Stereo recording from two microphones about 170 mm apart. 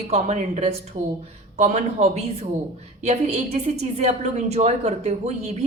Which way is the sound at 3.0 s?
40° right (ahead or behind).